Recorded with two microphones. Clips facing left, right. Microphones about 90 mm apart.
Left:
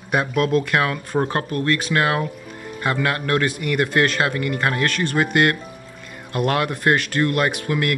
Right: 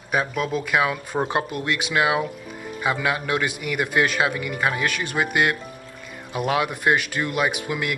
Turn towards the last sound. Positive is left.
turn(degrees=-5)  # may be behind; listen again after turning